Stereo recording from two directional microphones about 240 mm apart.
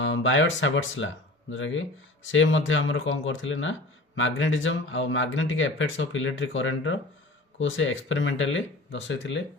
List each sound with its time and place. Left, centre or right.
0.0 s speech: left